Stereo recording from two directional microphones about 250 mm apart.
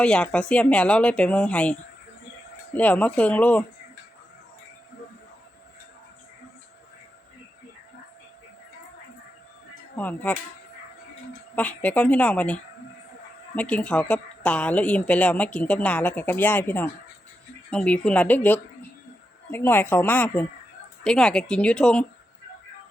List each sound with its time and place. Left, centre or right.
0.0 s speech: centre
10.0 s a woman's voice: centre
11.5 s speech: centre
13.6 s a woman's voice: centre